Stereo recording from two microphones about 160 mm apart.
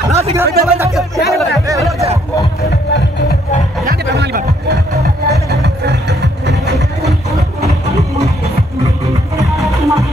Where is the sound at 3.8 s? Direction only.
85° right.